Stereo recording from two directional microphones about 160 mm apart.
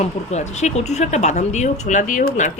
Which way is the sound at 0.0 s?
45° left (ahead or behind).